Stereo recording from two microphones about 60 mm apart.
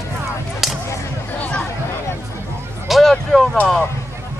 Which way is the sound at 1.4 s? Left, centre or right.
Left.